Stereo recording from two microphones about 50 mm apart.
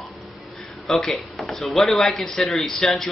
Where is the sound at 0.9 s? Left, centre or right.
Centre.